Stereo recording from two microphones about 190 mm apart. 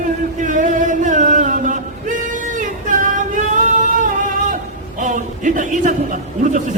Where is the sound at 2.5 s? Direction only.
40° right (ahead or behind).